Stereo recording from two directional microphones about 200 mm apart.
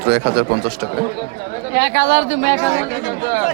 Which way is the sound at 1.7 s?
55° right (ahead or behind).